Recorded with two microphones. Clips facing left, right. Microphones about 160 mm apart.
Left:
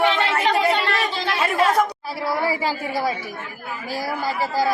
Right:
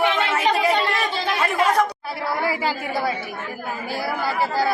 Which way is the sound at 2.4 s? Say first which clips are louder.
Left 1 dB; 40° left (ahead or behind).